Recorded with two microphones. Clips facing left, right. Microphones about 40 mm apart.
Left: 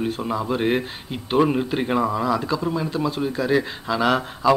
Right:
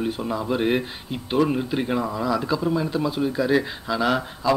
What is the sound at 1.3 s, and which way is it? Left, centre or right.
A man's voice, centre.